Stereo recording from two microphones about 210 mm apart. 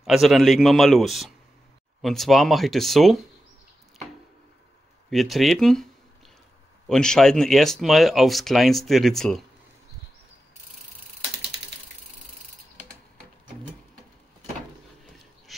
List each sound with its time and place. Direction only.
0.0 s speech: centre (ahead or behind)
5.1 s speech: centre (ahead or behind)
6.9 s speech: 5° left (ahead or behind)